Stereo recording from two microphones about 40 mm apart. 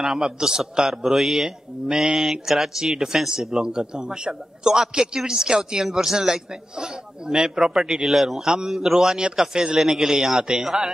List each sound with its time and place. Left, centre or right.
0.0 s a man's voice: centre